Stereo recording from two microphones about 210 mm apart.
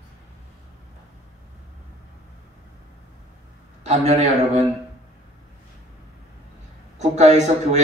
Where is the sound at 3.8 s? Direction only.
30° right (ahead or behind).